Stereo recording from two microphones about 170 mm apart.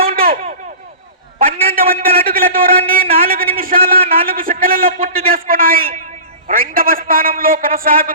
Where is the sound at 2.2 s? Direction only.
60° right (ahead or behind).